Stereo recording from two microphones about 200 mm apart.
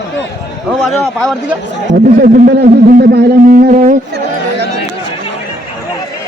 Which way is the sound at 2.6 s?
45° right (ahead or behind).